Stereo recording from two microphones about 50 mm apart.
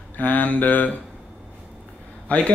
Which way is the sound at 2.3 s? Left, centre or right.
Left.